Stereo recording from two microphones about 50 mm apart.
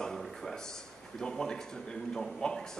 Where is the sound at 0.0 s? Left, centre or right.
Centre.